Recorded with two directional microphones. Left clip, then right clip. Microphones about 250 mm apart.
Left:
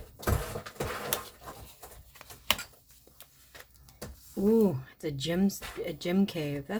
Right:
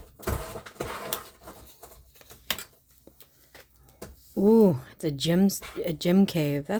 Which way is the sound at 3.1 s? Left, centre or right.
Right.